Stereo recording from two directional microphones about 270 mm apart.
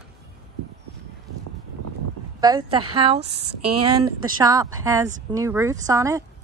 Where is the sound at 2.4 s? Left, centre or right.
Centre.